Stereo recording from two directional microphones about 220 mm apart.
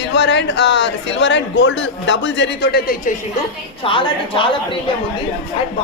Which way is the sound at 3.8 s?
25° left (ahead or behind).